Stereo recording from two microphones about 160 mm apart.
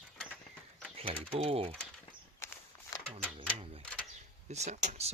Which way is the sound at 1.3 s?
35° right (ahead or behind).